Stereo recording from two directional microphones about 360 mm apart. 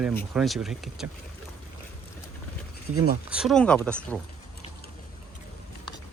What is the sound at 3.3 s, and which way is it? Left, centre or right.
Speech, centre.